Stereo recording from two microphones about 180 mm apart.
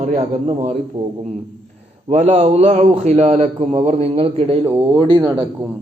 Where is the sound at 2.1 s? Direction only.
35° right (ahead or behind).